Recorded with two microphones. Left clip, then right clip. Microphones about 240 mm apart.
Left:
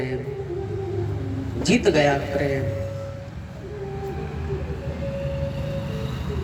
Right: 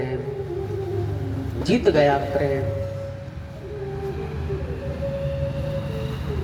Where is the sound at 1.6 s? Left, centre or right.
Left.